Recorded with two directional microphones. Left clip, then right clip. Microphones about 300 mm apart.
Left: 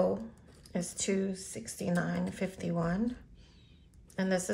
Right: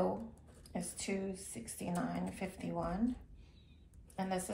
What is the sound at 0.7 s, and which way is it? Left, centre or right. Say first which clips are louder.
A woman's voice: left 7 dB; left.